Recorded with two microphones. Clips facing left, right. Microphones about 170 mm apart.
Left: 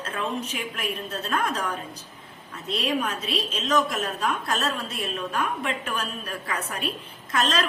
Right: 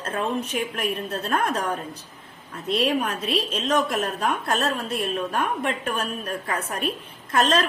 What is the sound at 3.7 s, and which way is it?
A woman's voice, 55° right (ahead or behind).